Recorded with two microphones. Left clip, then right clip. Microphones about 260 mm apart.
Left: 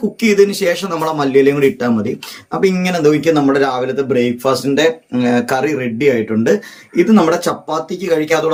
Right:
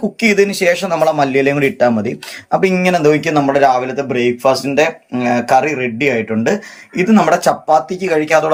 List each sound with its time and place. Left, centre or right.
0.2 s a man's voice: centre